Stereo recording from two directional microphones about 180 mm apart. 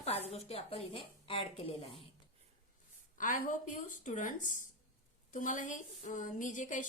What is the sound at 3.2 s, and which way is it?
Speech, 50° left (ahead or behind).